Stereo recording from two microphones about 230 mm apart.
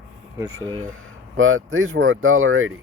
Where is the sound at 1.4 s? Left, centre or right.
Right.